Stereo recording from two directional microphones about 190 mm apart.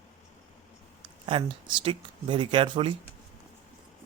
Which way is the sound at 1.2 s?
30° right (ahead or behind).